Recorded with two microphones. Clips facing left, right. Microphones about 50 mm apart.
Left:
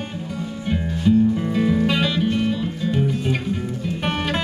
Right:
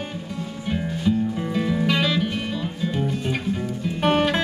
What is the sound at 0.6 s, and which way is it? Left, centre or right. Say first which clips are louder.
Music: left 3 dB; centre.